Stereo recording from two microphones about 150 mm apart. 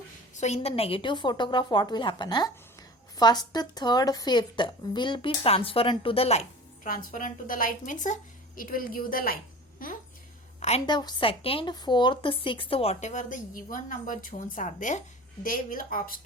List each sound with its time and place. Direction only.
0.3 s a woman's voice: 50° left (ahead or behind)
6.8 s a woman's voice: 70° left (ahead or behind)
10.6 s a woman's voice: 45° left (ahead or behind)
10.8 s a woman's voice: 30° left (ahead or behind); by 16.2 s 70° left (ahead or behind)